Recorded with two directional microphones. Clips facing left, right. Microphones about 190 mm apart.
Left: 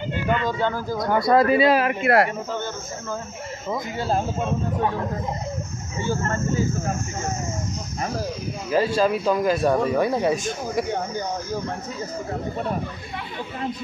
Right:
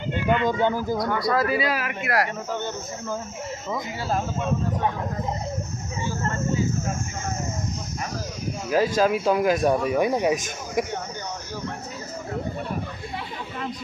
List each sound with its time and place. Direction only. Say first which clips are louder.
0.4 s speech: right 2 dB; 20° right (ahead or behind)
0.9 s speech: left 5 dB; 25° left (ahead or behind)
4.1 s speech: left 1 dB; 30° left (ahead or behind)
8.6 s speech: even; 5° right (ahead or behind)